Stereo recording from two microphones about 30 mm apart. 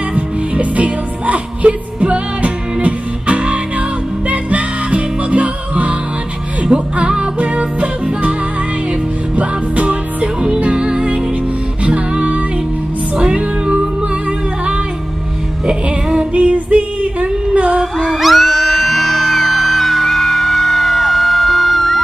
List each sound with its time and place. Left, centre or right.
0.1 s music: right
6.7 s music: right
7.3 s music: right
9.8 s music: right
15.6 s music: right
16.3 s female singing: right
18.2 s music: centre